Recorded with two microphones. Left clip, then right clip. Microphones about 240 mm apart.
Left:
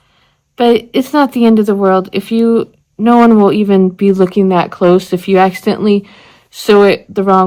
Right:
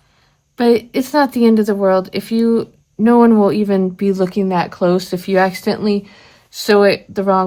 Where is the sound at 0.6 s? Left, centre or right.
Left.